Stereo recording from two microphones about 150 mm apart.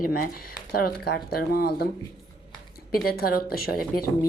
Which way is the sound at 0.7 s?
85° left.